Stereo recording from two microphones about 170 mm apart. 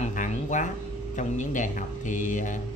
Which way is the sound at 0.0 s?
45° left (ahead or behind).